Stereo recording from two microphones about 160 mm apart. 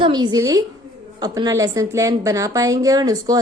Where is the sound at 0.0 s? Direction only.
25° right (ahead or behind).